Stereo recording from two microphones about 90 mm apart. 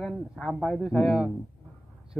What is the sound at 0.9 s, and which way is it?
Speech, 10° right (ahead or behind).